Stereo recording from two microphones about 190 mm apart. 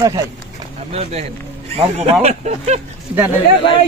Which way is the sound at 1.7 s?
30° right (ahead or behind).